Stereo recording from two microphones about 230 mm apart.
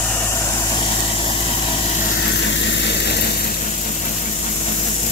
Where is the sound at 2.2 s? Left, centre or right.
Left.